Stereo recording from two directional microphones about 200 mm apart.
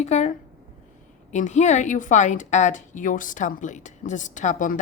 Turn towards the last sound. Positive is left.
turn(degrees=40)  # may be behind; listen again after turning